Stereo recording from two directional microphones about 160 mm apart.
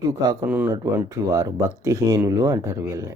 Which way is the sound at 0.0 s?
25° right (ahead or behind).